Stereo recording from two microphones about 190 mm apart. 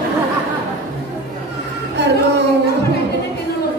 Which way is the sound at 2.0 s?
65° right (ahead or behind).